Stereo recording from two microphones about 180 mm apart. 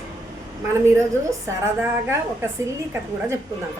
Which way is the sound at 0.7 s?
15° right (ahead or behind).